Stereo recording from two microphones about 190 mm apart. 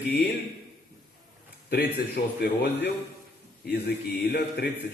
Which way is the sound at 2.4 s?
60° left (ahead or behind).